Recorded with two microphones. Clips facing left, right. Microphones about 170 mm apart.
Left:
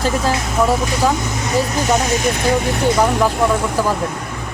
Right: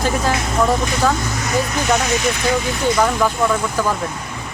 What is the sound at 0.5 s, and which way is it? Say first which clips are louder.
Speech: left 1 dB; 5° left (ahead or behind).